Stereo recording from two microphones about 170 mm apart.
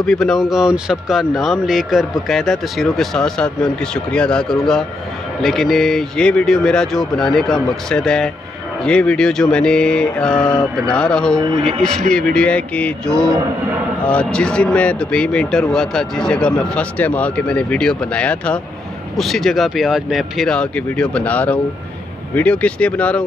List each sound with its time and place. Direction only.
0.0 s speech: 5° left (ahead or behind)
11.5 s speech: 35° right (ahead or behind)
12.1 s speech: 5° left (ahead or behind)